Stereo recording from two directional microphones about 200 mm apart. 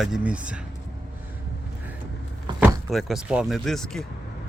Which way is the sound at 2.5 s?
5° right (ahead or behind).